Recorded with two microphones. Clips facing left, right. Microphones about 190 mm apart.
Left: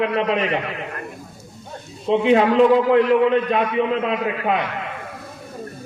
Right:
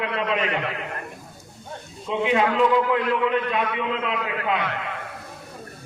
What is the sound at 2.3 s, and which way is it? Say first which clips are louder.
A man's voice: left 5 dB; 40° left (ahead or behind).